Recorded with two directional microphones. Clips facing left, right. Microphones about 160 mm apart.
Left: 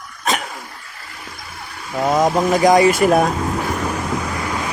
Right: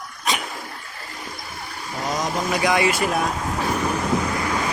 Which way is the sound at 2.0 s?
55° left (ahead or behind).